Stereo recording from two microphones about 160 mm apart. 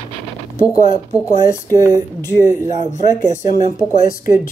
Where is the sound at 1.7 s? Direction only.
20° right (ahead or behind).